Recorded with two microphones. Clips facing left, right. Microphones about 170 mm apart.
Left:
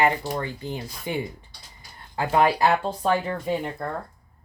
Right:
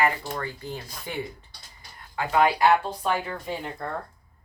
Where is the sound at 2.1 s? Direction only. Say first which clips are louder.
Left 2 dB; 30° left (ahead or behind).